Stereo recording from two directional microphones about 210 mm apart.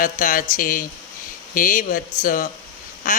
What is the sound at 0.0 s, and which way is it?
A man's voice, 40° left (ahead or behind).